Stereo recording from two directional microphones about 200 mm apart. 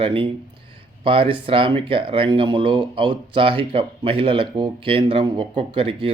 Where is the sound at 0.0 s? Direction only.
25° right (ahead or behind).